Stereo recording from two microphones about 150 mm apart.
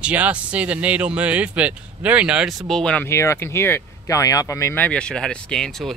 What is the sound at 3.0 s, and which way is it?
Speech, 20° left (ahead or behind).